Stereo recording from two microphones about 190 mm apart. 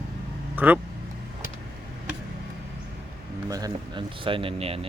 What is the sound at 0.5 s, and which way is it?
Speech, 10° right (ahead or behind).